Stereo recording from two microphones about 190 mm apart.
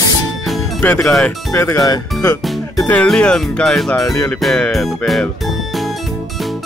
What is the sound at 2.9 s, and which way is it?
Speech, 5° left (ahead or behind).